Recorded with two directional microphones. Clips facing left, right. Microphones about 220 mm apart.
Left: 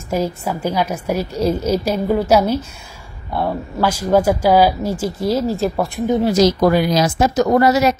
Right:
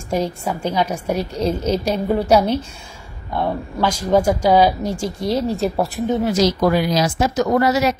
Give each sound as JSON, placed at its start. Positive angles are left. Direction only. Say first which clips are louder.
{"t": 0.1, "sound": "a woman's voice", "louder": "left 1 dB", "side_deg": 5}
{"t": 6.2, "sound": "speech", "louder": "left 4 dB", "side_deg": 40}